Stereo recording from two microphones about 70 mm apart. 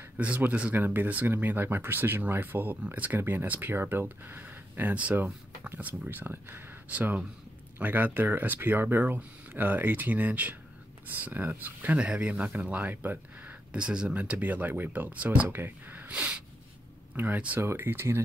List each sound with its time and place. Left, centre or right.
0.2 s speech: right
16.1 s snort: centre
17.1 s speech: right